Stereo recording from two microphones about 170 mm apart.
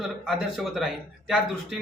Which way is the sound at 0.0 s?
Centre (ahead or behind).